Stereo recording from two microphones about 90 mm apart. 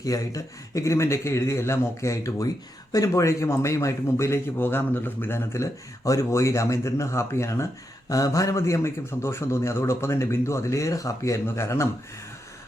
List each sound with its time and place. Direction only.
0.0 s a man's voice: 40° left (ahead or behind)